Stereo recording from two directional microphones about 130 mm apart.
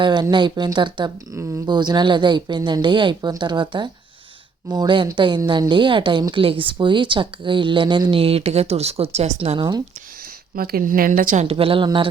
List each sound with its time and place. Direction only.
0.0 s speech: 35° right (ahead or behind)
1.4 s speech: 20° right (ahead or behind)
1.6 s speech: 35° right (ahead or behind); by 9.6 s 55° right (ahead or behind)
9.6 s speech: 30° right (ahead or behind)
10.5 s a woman's voice: 90° right
11.4 s speech: 45° right (ahead or behind)